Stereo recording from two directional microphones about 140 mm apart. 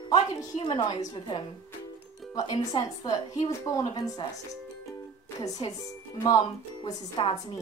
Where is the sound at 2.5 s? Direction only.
30° left (ahead or behind).